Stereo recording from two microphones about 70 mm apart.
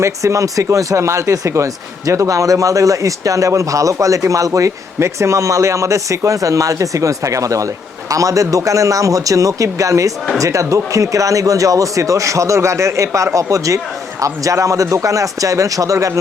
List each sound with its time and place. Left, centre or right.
0.0 s speech: right